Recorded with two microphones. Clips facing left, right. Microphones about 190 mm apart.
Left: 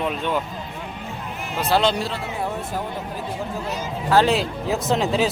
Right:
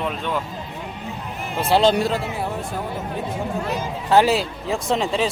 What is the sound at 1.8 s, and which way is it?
Speech, 40° right (ahead or behind).